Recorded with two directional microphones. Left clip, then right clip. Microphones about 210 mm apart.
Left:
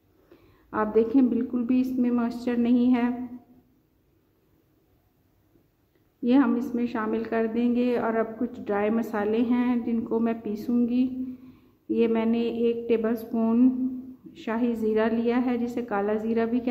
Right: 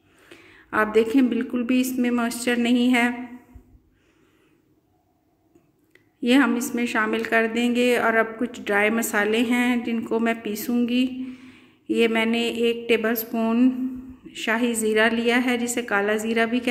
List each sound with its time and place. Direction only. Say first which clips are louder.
0.3 s a woman's voice: right 7 dB; 5° right (ahead or behind)
6.2 s a woman's voice: right 3 dB; 5° right (ahead or behind)